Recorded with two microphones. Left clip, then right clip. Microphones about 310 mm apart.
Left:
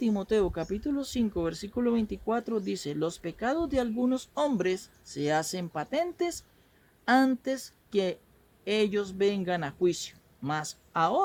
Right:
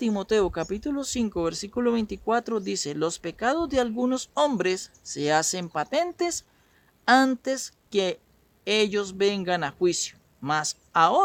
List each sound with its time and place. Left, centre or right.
0.0 s speech: right